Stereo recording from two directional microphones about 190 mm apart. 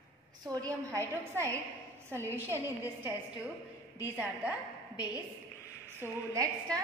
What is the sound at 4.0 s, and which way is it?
Speech, 10° right (ahead or behind).